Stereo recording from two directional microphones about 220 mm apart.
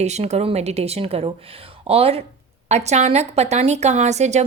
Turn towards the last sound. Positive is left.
turn(degrees=-30)  # may be behind; listen again after turning